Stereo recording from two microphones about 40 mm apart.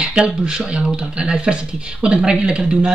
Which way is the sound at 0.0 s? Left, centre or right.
Centre.